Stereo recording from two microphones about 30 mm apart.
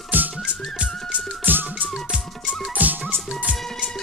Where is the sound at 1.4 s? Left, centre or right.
Right.